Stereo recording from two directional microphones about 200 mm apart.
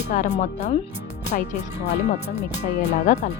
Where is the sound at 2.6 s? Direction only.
55° left (ahead or behind).